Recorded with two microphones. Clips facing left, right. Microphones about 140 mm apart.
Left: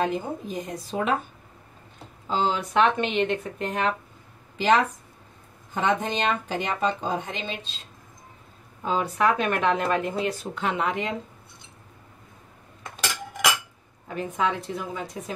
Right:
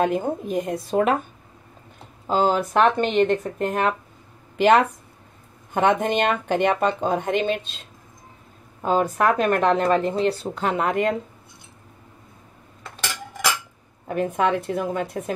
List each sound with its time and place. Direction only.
0.0 s speech: 55° right (ahead or behind)
2.2 s speech: 50° right (ahead or behind)
8.8 s speech: 45° right (ahead or behind)
14.0 s speech: 55° right (ahead or behind)